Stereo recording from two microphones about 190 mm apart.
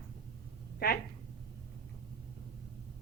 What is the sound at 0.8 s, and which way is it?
Speech, 50° left (ahead or behind).